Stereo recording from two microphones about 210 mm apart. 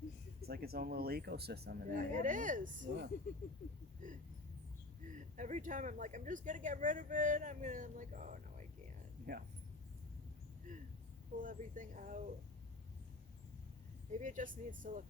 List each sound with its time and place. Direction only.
0.4 s speech: 45° right (ahead or behind)
4.0 s speech: 40° right (ahead or behind)
10.7 s a sound: 40° right (ahead or behind)
11.3 s speech: 40° right (ahead or behind)
14.1 s speech: 35° right (ahead or behind)